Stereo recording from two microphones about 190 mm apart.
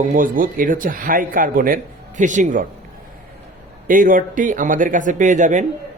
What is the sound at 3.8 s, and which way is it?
A man's voice, 45° right (ahead or behind).